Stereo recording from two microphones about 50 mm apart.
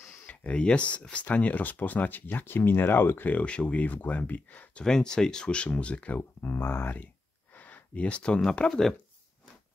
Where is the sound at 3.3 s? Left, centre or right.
Left.